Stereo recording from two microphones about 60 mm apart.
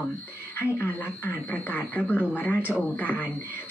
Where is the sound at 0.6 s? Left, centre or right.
Left.